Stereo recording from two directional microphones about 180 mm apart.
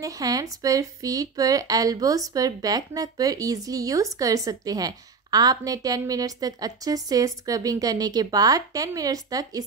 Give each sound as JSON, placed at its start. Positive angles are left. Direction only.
{"t": 0.0, "sound": "speech", "side_deg": -20}